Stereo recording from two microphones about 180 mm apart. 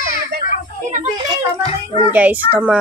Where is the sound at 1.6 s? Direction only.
35° left (ahead or behind).